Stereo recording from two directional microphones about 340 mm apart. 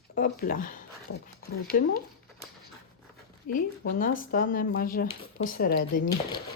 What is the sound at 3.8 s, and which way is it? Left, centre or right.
A woman's voice, left.